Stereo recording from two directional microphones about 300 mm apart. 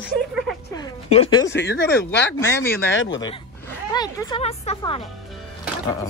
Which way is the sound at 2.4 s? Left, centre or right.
Centre.